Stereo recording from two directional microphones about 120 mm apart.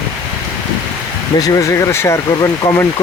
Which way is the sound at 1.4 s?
30° left (ahead or behind).